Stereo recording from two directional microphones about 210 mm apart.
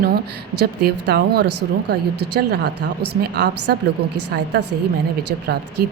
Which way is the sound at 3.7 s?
50° right (ahead or behind).